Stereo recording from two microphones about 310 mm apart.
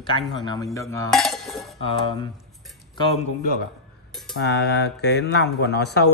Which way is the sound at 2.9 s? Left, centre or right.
Centre.